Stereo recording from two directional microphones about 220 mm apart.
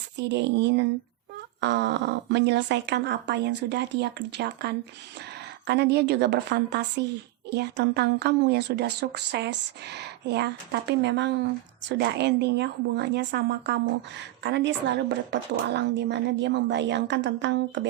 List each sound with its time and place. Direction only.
0.2 s speech: 50° right (ahead or behind)